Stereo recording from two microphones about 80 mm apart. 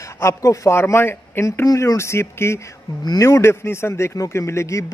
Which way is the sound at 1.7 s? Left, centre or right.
Left.